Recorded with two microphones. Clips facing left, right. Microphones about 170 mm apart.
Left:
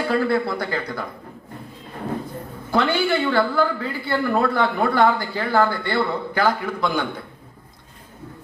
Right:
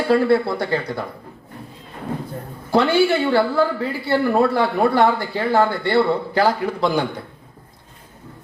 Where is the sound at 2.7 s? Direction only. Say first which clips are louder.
Right 4 dB; 30° right (ahead or behind).